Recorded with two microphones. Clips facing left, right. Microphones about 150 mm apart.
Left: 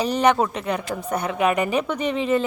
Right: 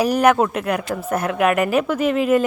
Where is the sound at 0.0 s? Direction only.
10° right (ahead or behind).